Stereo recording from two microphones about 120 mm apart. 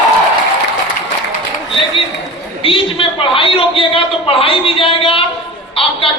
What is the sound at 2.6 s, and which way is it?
A man's voice, 50° left (ahead or behind).